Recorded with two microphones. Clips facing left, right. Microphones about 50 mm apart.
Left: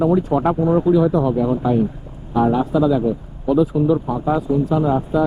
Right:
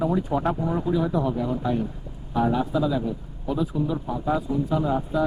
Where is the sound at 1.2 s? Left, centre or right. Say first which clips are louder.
Left 7 dB; centre.